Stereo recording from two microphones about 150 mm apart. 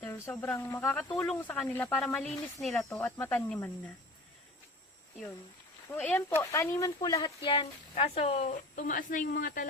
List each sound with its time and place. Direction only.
0.0 s speech: 15° left (ahead or behind)
2.6 s speech: 5° left (ahead or behind)
5.9 s speech: 15° left (ahead or behind)
7.3 s speech: 35° left (ahead or behind); by 9.6 s 65° left (ahead or behind)